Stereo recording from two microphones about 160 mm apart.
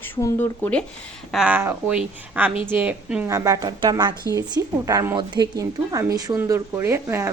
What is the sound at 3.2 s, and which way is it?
Speech, 20° right (ahead or behind).